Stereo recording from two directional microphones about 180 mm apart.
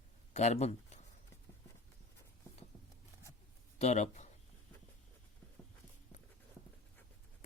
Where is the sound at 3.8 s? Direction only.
40° left (ahead or behind).